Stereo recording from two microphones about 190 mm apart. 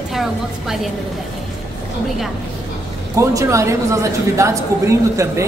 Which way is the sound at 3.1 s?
15° right (ahead or behind).